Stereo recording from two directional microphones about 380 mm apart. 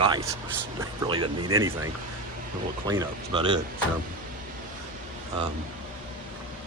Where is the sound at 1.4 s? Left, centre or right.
Right.